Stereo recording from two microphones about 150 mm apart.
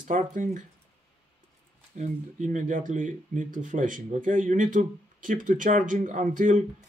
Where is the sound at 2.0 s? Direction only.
55° right (ahead or behind).